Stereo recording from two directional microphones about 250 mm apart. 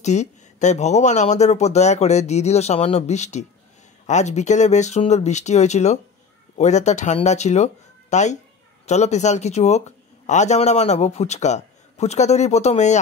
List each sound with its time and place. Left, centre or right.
0.0 s speech: left